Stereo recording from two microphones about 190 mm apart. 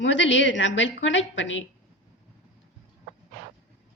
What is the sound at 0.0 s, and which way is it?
A woman's voice, 75° left (ahead or behind).